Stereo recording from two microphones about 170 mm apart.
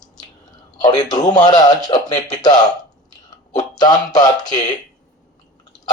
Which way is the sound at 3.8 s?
25° left (ahead or behind).